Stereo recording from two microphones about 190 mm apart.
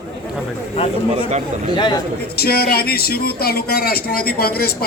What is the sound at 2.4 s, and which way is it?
Speech, 55° left (ahead or behind).